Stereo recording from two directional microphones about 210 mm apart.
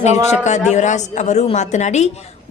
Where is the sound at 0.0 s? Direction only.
35° left (ahead or behind).